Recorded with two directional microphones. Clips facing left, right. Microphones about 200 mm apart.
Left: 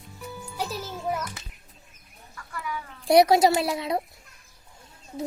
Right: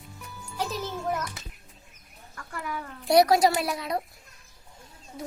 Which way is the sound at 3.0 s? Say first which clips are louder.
Left 2 dB; 25° left (ahead or behind).